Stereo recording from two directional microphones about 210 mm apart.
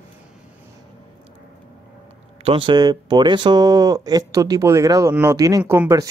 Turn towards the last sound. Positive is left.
turn(degrees=-15)  # may be behind; listen again after turning